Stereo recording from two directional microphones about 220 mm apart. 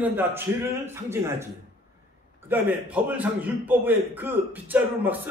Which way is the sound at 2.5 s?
5° right (ahead or behind).